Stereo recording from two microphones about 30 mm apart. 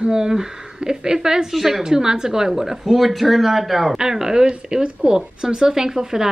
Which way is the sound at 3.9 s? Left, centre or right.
Centre.